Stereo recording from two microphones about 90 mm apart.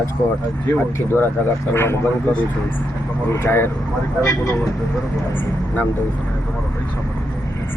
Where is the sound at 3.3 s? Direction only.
30° left (ahead or behind).